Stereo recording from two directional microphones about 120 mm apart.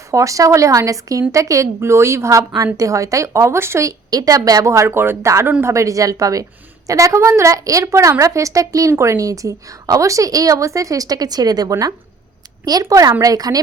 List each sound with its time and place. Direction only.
0.1 s a woman's voice: 25° right (ahead or behind)